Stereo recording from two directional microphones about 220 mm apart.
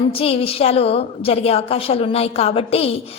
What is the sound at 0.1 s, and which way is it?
A woman's voice, 25° left (ahead or behind).